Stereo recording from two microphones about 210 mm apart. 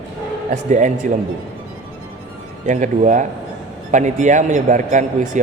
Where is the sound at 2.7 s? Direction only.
35° right (ahead or behind).